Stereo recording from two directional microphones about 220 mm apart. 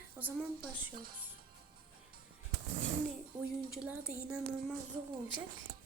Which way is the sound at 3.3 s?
5° right (ahead or behind).